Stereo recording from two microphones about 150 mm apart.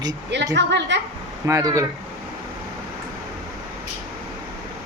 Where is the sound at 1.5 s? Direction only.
20° right (ahead or behind).